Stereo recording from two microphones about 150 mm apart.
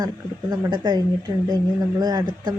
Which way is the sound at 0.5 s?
30° right (ahead or behind).